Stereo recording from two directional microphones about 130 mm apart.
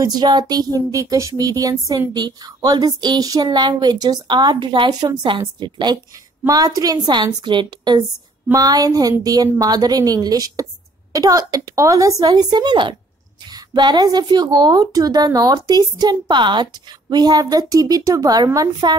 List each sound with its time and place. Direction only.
0.0 s a woman's voice: 30° right (ahead or behind)